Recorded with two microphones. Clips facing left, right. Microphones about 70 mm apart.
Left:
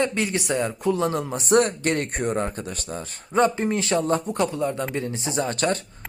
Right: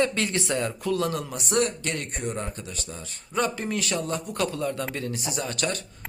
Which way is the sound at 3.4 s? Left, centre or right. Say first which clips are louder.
Left 6 dB; left.